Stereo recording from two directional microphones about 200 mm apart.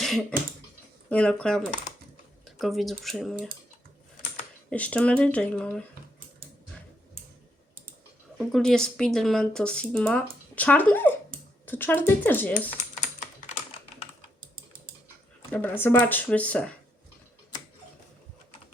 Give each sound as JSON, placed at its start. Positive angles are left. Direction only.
{"t": 0.0, "sound": "a sound", "side_deg": 0}
{"t": 1.1, "sound": "speech", "side_deg": 5}
{"t": 4.7, "sound": "speech", "side_deg": 5}
{"t": 8.4, "sound": "speech", "side_deg": 0}
{"t": 12.7, "sound": "typing", "side_deg": 35}
{"t": 15.8, "sound": "speech", "side_deg": 10}